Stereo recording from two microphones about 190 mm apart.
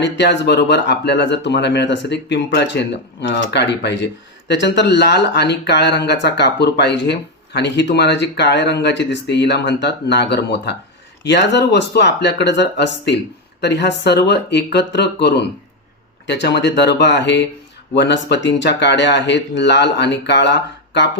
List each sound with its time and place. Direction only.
0.0 s speech: 65° left (ahead or behind)